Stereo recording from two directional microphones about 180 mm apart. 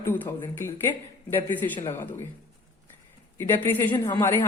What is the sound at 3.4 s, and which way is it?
Speech, 10° left (ahead or behind).